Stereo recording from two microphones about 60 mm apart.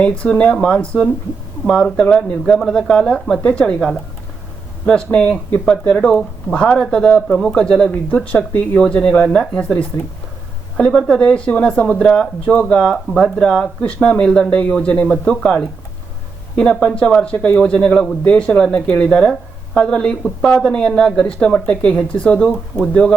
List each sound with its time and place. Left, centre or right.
0.0 s speech: centre